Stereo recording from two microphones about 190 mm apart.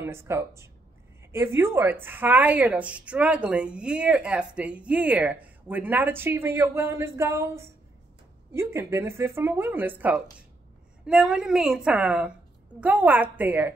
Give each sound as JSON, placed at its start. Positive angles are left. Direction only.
{"t": 0.0, "sound": "a woman's voice", "side_deg": -15}